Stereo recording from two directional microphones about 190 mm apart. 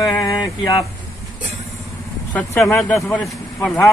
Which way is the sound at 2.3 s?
10° left (ahead or behind).